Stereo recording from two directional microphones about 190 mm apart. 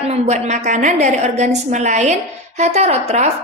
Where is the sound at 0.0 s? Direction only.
35° right (ahead or behind).